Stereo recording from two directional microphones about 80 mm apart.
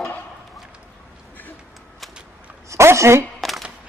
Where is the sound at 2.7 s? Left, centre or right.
Right.